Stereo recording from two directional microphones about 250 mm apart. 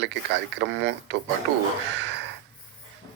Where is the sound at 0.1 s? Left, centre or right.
Right.